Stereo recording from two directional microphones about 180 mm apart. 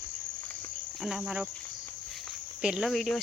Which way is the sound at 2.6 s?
5° right (ahead or behind).